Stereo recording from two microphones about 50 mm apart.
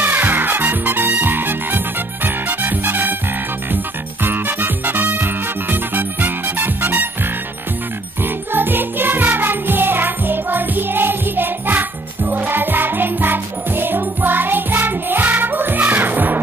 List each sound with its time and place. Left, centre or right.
0.0 s music: right
4.2 s music: right
8.2 s music: right